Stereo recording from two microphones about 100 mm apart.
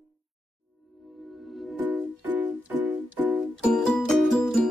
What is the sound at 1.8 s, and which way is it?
Music, 15° right (ahead or behind).